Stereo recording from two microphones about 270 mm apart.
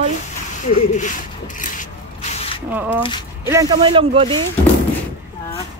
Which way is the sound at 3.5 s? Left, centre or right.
Centre.